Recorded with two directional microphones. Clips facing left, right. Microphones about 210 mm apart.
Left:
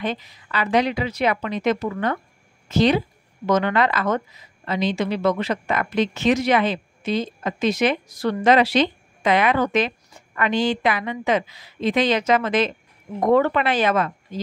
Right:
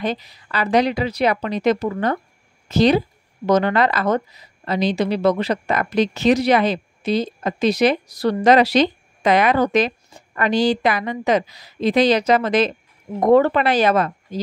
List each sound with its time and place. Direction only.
0.0 s a woman's voice: 35° right (ahead or behind)